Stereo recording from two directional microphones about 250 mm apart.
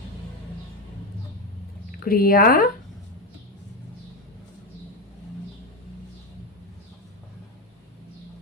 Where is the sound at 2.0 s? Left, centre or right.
Left.